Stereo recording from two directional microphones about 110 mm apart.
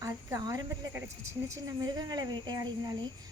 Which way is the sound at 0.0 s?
30° right (ahead or behind).